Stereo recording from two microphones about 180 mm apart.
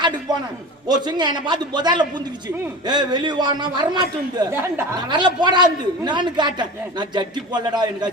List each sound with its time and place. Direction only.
0.3 s a sound: 20° right (ahead or behind)
0.9 s a man's voice: 25° right (ahead or behind)
5.0 s a man's voice: 25° right (ahead or behind)